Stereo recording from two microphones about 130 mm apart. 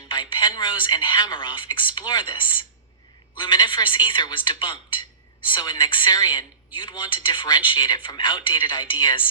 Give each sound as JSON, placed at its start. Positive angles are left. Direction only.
{"t": 0.1, "sound": "a woman's voice", "side_deg": 35}